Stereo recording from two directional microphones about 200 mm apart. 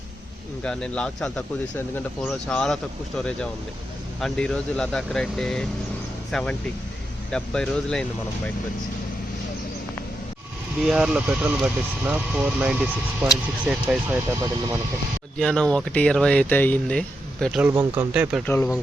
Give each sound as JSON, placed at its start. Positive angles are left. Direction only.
{"t": 0.6, "sound": "speech", "side_deg": 5}
{"t": 4.2, "sound": "speech", "side_deg": 5}
{"t": 10.8, "sound": "speech", "side_deg": -5}
{"t": 15.4, "sound": "speech", "side_deg": 5}
{"t": 17.7, "sound": "speech", "side_deg": -10}
{"t": 18.4, "sound": "speech", "side_deg": 10}